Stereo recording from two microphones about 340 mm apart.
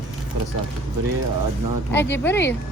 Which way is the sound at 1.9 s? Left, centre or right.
Centre.